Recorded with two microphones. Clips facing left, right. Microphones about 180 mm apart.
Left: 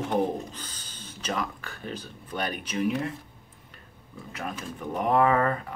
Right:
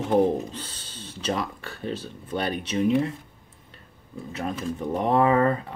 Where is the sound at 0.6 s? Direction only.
30° right (ahead or behind).